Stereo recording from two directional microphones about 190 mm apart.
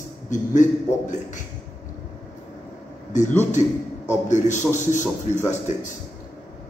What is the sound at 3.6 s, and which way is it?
A man's voice, 40° left (ahead or behind).